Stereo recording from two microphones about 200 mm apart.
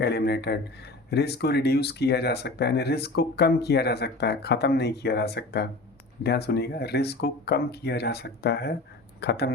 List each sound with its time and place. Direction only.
0.0 s speech: 55° left (ahead or behind)